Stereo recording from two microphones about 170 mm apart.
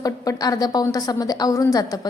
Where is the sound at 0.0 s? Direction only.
20° left (ahead or behind).